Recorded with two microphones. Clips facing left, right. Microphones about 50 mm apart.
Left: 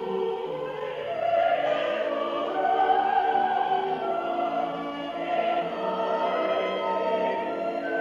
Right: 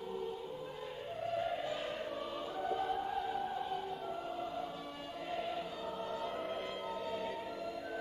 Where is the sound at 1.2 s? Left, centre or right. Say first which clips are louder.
Left 14 dB; left.